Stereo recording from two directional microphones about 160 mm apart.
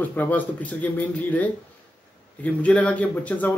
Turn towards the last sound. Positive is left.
turn(degrees=10)  # may be behind; listen again after turning